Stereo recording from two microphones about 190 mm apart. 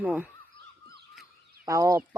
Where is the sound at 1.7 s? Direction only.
15° right (ahead or behind).